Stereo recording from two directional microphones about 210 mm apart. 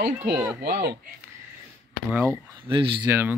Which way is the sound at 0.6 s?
50° right (ahead or behind).